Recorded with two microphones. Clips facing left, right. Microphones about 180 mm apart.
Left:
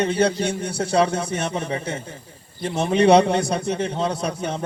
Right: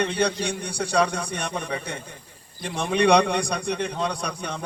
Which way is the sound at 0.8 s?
25° left (ahead or behind).